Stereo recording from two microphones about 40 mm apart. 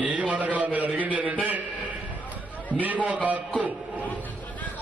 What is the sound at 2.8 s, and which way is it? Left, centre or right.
Speech, right.